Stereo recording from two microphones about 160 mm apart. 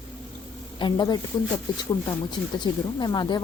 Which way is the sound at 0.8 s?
25° left (ahead or behind).